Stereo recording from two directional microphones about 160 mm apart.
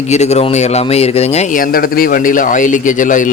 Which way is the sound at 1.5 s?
65° left (ahead or behind).